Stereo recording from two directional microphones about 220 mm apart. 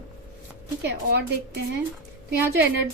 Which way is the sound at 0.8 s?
50° right (ahead or behind).